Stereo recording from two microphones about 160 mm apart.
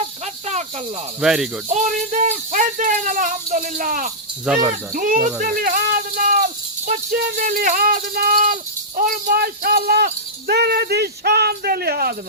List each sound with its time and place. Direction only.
0.0 s cricket: 45° right (ahead or behind)
1.2 s speech: 5° right (ahead or behind)
1.7 s speech: 50° right (ahead or behind)
4.5 s speech: 5° right (ahead or behind)
4.9 s speech: 60° right (ahead or behind); by 12.1 s 80° right